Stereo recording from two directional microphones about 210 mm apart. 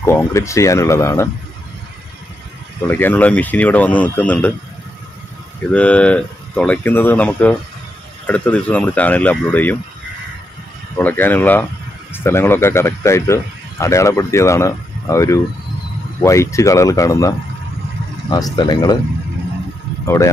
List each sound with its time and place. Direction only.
0.0 s speech: 10° left (ahead or behind)
2.9 s speech: 10° left (ahead or behind)
5.7 s speech: 5° left (ahead or behind)
11.0 s speech: 10° left (ahead or behind)